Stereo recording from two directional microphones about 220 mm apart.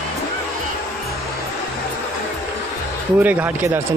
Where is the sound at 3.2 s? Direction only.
10° right (ahead or behind).